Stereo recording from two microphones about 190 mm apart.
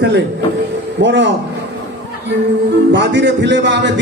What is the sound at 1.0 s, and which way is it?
Speech, 65° right (ahead or behind).